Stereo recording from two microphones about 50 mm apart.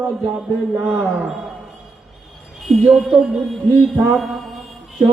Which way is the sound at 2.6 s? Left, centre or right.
Centre.